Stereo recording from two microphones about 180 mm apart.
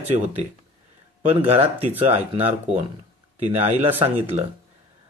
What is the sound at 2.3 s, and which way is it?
Speech, 40° right (ahead or behind).